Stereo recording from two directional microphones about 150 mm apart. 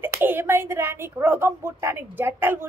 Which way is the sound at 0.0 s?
15° right (ahead or behind).